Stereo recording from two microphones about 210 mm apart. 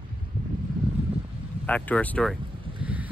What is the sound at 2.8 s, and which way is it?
Boat, 5° right (ahead or behind).